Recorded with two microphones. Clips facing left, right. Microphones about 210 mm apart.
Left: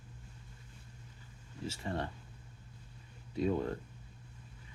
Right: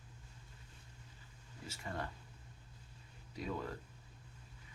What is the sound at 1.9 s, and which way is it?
Speech, 30° left (ahead or behind).